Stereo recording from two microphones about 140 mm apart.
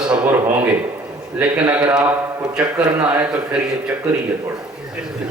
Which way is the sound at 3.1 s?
10° right (ahead or behind).